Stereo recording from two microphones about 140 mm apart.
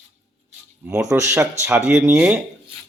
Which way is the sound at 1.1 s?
20° right (ahead or behind).